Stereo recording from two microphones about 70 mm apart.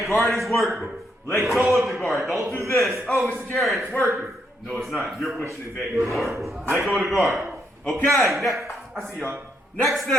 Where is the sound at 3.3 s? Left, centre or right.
Centre.